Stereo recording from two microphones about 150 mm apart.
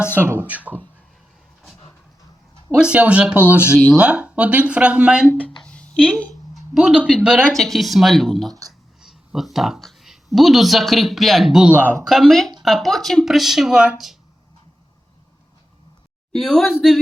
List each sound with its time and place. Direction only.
0.2 s speech: 15° right (ahead or behind)
2.7 s speech: 5° right (ahead or behind)
5.6 s a sound: 5° left (ahead or behind)
6.1 s speech: centre (ahead or behind)
9.0 s a sound: centre (ahead or behind)
10.3 s speech: centre (ahead or behind)
12.1 s speech: centre (ahead or behind)
16.3 s speech: 5° left (ahead or behind)